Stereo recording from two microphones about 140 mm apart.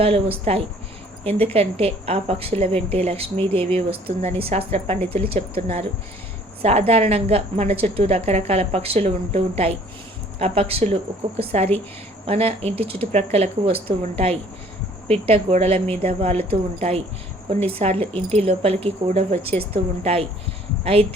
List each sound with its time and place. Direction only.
0.0 s a woman's voice: 45° right (ahead or behind)
6.6 s a woman's voice: 45° right (ahead or behind)